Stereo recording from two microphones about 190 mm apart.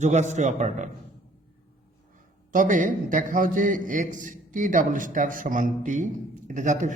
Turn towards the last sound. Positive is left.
turn(degrees=-40)  # may be behind; listen again after turning